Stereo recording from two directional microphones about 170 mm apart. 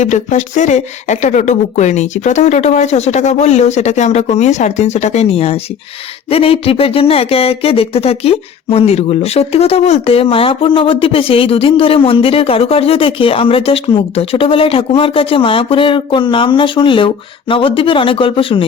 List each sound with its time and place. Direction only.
0.0 s speech: 45° left (ahead or behind)